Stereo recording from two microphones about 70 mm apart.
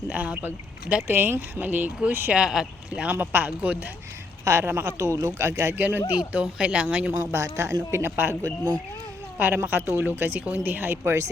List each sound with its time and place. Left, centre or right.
0.1 s speech: right
1.0 s speech: right
2.3 s speech: centre
3.0 s speech: right
4.4 s speech: right
4.8 s speech: right
5.7 s speech: right
6.1 s speech: centre
7.1 s speech: right
7.3 s speech: right
7.9 s speech: right
8.4 s speech: right
9.4 s speech: right